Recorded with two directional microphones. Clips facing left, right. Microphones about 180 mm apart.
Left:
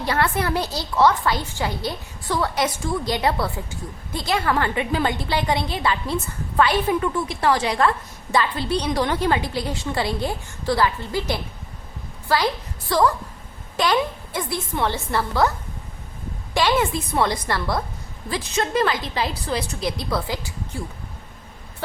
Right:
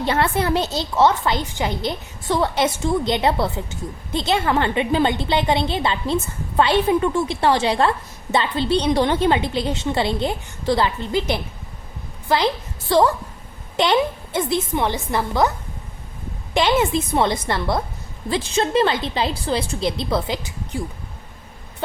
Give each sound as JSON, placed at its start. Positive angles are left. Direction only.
{"t": 0.0, "sound": "a woman's voice", "side_deg": -25}
{"t": 16.6, "sound": "a woman's voice", "side_deg": -20}